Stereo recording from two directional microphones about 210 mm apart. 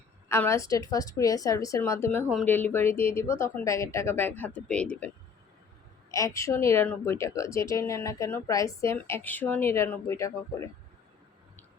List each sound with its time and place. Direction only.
0.3 s a woman's voice: 15° left (ahead or behind)